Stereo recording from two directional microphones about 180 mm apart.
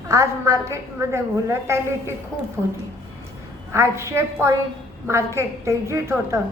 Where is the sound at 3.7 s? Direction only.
15° right (ahead or behind).